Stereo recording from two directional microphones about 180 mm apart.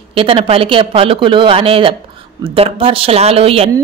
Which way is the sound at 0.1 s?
30° right (ahead or behind).